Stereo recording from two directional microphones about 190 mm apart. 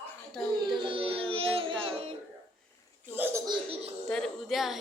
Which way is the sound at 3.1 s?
10° right (ahead or behind).